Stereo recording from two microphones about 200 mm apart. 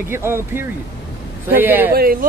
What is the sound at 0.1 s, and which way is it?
Speech, 10° right (ahead or behind).